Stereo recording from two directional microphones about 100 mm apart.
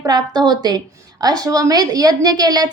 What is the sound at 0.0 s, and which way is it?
A woman's voice, 40° right (ahead or behind).